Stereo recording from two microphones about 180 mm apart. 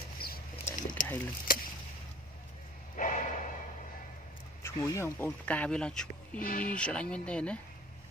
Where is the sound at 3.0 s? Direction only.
45° left (ahead or behind).